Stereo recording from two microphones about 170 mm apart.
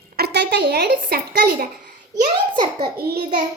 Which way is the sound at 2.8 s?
65° right (ahead or behind).